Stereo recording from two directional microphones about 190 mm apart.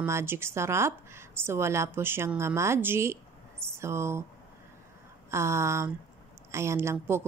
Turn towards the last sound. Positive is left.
turn(degrees=-15)  # may be behind; listen again after turning